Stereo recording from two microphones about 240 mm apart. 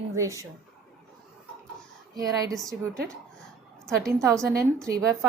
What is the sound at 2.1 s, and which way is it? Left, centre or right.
Speech, centre.